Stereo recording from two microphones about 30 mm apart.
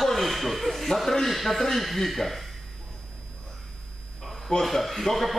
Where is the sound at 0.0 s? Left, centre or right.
Centre.